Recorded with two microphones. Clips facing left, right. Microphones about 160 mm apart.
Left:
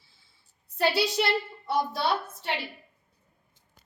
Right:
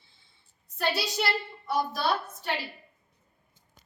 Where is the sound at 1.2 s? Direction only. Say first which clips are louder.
Left 3 dB; 25° left (ahead or behind).